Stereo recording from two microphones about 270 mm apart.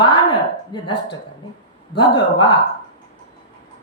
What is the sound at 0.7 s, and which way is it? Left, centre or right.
Speech, centre.